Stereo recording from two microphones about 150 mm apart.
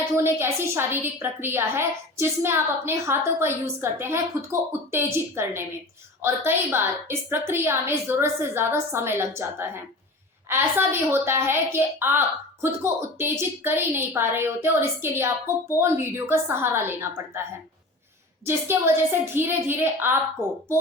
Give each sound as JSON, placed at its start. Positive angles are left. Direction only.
{"t": 0.2, "sound": "a woman's voice", "side_deg": -15}
{"t": 18.4, "sound": "a woman's voice", "side_deg": -15}